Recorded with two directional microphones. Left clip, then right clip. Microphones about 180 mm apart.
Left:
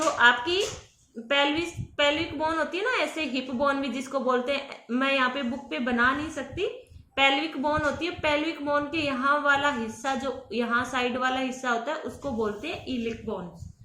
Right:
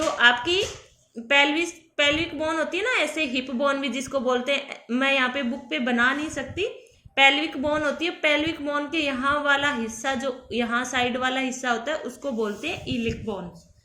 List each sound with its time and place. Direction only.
0.2 s a woman's voice: 25° right (ahead or behind)